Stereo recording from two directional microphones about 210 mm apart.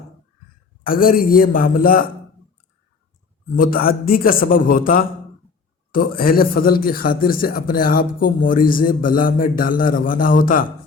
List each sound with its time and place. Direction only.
0.9 s a man's voice: 45° left (ahead or behind)
3.5 s a man's voice: 45° left (ahead or behind)